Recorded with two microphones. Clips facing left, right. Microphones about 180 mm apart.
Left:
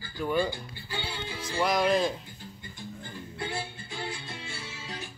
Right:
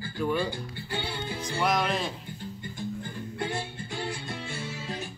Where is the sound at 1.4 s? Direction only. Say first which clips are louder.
Even; centre (ahead or behind).